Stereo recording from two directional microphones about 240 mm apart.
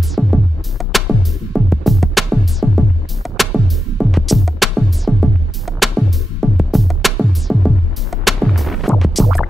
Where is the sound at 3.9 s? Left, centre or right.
Centre.